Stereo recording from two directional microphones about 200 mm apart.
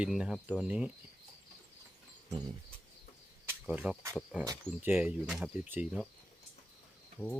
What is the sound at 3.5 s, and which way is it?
Cricket, 5° right (ahead or behind).